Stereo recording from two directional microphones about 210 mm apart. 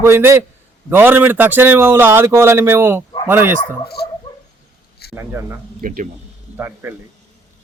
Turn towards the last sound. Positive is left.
turn(degrees=-10)  # may be behind; listen again after turning